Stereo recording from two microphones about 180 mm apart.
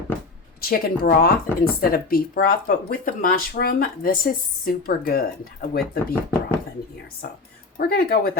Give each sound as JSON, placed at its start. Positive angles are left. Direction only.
{"t": 0.6, "sound": "speech", "side_deg": 55}
{"t": 7.8, "sound": "speech", "side_deg": 55}